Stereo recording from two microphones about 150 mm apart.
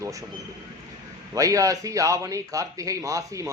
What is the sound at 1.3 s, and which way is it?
Speech, 20° right (ahead or behind).